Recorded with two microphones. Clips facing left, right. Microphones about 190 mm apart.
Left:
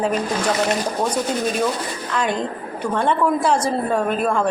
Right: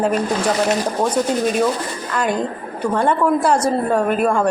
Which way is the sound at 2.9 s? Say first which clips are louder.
Right 2 dB; 5° right (ahead or behind).